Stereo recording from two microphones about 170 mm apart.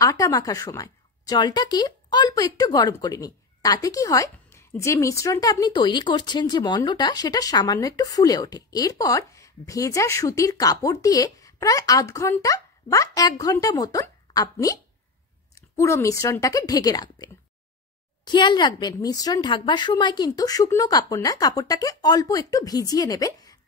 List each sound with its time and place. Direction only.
0.0 s speech: 20° left (ahead or behind)